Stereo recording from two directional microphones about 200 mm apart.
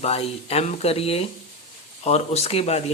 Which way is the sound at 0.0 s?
30° left (ahead or behind).